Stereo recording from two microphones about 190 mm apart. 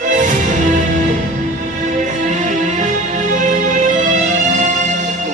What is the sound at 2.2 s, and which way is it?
Music, 40° right (ahead or behind).